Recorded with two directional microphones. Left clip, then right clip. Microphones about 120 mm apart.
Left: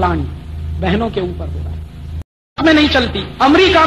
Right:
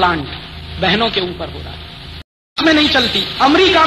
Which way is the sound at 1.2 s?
25° right (ahead or behind).